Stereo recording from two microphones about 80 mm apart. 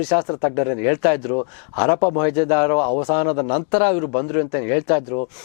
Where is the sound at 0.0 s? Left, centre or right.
Centre.